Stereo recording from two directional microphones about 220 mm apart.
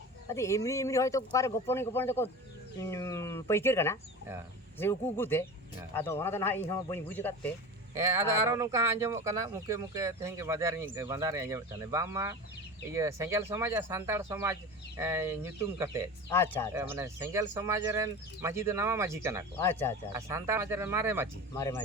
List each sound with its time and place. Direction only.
0.3 s speech: 15° left (ahead or behind)
7.9 s speech: 15° right (ahead or behind)
16.3 s speech: 10° left (ahead or behind)
16.7 s speech: 10° right (ahead or behind)
19.5 s speech: 10° left (ahead or behind)
20.1 s speech: 15° right (ahead or behind)
21.5 s speech: 15° left (ahead or behind)